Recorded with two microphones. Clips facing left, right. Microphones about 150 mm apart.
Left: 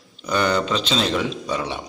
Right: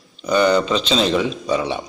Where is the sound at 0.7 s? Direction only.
5° left (ahead or behind).